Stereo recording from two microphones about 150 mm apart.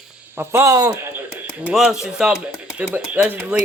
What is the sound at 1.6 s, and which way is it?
Speech, 5° right (ahead or behind).